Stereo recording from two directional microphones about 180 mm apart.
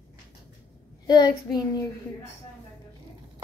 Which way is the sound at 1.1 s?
20° left (ahead or behind).